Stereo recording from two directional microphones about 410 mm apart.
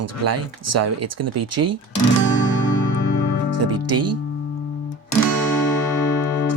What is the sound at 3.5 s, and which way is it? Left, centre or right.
Speech, right.